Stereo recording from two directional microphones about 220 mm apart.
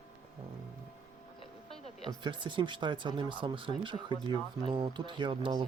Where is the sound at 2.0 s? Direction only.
20° right (ahead or behind).